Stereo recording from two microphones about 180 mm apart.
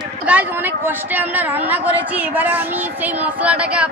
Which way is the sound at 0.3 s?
10° right (ahead or behind).